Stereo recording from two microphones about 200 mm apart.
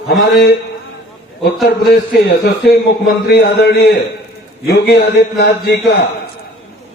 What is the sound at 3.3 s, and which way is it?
A man's voice, 55° left (ahead or behind).